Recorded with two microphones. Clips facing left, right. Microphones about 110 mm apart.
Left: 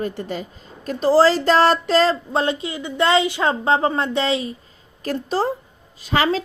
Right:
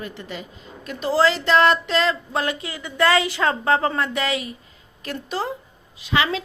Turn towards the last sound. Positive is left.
turn(degrees=40)  # may be behind; listen again after turning